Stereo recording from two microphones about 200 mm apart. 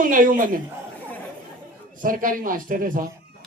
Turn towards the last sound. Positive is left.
turn(degrees=-45)  # may be behind; listen again after turning